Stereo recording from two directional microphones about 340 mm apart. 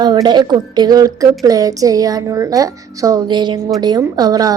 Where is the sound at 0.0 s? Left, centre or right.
Centre.